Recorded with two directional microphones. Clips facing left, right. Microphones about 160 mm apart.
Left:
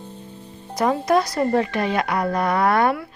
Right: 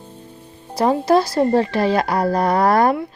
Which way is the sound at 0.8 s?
30° right (ahead or behind).